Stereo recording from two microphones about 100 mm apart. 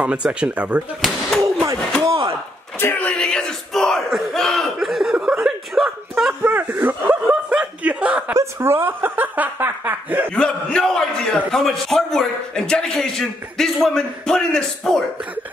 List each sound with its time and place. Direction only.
0.0 s speech: 10° right (ahead or behind)
1.4 s a sound: 30° right (ahead or behind)
2.8 s speech: 15° left (ahead or behind)
3.2 s a man's voice: 5° left (ahead or behind)
6.4 s snicker: 20° right (ahead or behind)
8.4 s speech: 25° right (ahead or behind)
10.3 s a man's voice: 10° left (ahead or behind)